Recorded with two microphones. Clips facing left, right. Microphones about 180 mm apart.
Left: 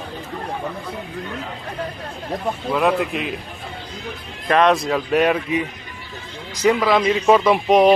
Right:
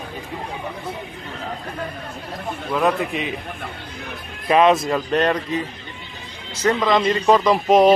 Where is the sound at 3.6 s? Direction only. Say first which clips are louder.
Even; 60° right (ahead or behind).